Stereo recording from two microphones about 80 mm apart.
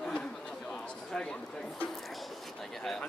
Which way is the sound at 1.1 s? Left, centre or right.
Centre.